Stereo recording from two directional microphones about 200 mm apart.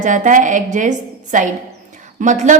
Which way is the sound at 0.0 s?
40° right (ahead or behind).